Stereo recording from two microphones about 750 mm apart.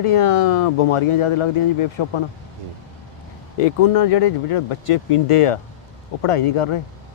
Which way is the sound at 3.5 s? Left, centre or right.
Left.